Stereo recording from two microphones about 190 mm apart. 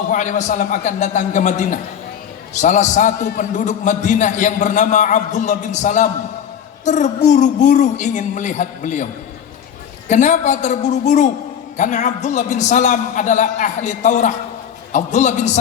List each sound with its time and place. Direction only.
0.1 s a man's voice: 40° left (ahead or behind)
10.1 s a man's voice: 40° left (ahead or behind)